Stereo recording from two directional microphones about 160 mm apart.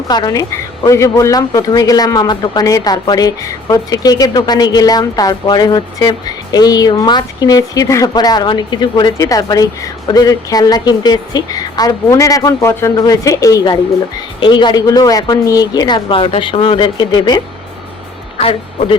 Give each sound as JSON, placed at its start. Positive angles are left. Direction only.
{"t": 0.1, "sound": "speech", "side_deg": 25}